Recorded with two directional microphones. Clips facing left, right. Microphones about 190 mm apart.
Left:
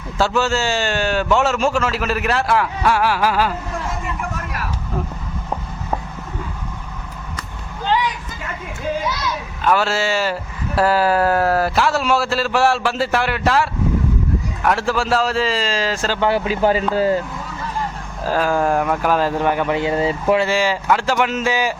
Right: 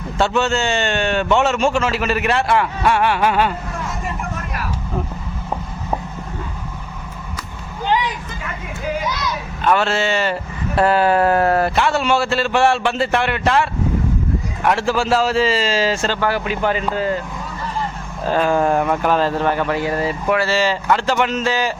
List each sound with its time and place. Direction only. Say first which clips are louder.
0.2 s a man's voice: even; centre (ahead or behind)
9.6 s a man's voice: right 1 dB; 5° left (ahead or behind)
16.2 s a man's voice: left 5 dB; 25° left (ahead or behind)
18.3 s speech: right 1 dB; centre (ahead or behind)